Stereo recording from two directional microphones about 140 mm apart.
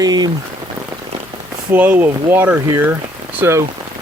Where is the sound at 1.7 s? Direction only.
10° right (ahead or behind).